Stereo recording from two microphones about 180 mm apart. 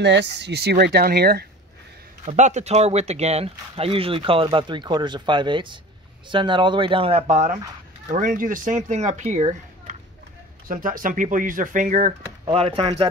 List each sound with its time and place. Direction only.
0.0 s speech: 75° right (ahead or behind); by 1.5 s 60° right (ahead or behind)
2.2 s speech: 40° right (ahead or behind)